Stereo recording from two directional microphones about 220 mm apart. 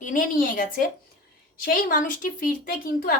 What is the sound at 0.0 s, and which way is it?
Speech, 40° left (ahead or behind).